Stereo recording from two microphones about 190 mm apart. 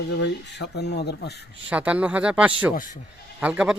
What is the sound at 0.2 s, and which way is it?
Speech, 60° left (ahead or behind).